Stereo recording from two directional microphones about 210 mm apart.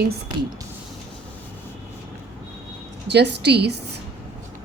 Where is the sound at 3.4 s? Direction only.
50° right (ahead or behind).